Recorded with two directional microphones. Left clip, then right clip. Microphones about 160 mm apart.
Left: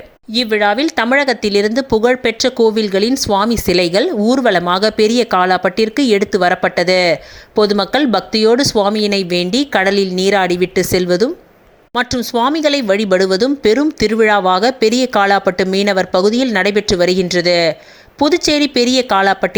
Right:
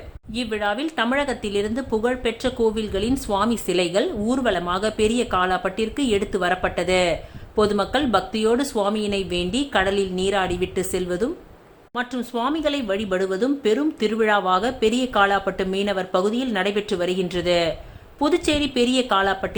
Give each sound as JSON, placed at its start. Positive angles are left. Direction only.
{"t": 0.3, "sound": "speech", "side_deg": 40}
{"t": 12.3, "sound": "speech", "side_deg": 40}